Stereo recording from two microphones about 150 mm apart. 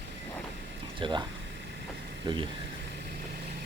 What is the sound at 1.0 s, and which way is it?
Speech, 30° right (ahead or behind).